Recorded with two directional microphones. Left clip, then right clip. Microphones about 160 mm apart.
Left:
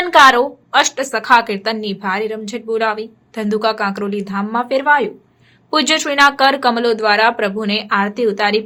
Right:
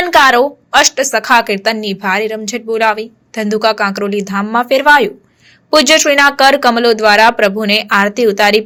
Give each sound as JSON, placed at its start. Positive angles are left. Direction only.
{"t": 0.1, "sound": "a woman's voice", "side_deg": -20}